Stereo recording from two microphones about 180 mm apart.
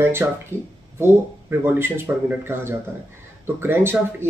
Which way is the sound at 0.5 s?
15° right (ahead or behind).